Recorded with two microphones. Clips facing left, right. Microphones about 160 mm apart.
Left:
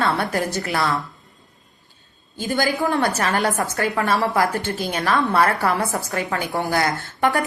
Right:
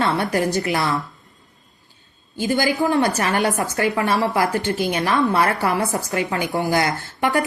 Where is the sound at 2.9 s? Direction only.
15° right (ahead or behind).